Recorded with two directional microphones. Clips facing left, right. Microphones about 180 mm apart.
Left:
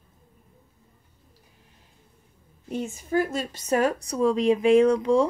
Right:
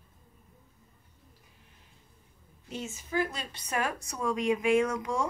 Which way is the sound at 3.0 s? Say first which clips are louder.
Left 6 dB; 50° left (ahead or behind).